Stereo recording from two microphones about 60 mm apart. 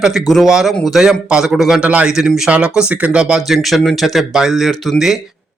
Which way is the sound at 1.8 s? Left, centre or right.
Centre.